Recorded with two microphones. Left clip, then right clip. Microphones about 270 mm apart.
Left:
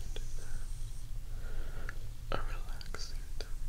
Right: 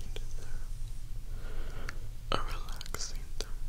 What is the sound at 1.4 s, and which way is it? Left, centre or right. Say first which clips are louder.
Whispering: right 3 dB; centre.